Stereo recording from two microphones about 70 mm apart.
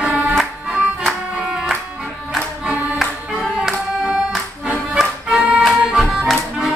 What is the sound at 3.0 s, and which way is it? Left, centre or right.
Music, centre.